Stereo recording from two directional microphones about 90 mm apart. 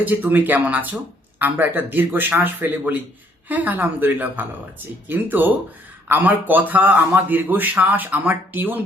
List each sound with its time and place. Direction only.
0.0 s a man's voice: 20° right (ahead or behind)